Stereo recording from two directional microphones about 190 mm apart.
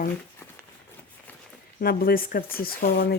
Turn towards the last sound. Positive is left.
turn(degrees=50)  # may be behind; listen again after turning